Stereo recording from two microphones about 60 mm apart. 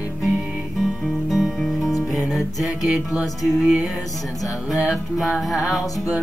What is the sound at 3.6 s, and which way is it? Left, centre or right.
Music, centre.